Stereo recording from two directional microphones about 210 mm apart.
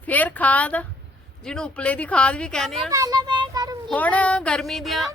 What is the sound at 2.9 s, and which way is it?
Speech, 15° right (ahead or behind).